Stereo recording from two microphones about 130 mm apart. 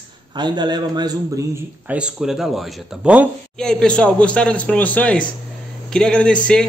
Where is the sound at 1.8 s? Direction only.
10° right (ahead or behind).